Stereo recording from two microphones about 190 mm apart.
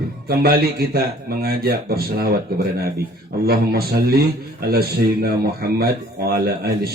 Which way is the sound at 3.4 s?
55° right (ahead or behind).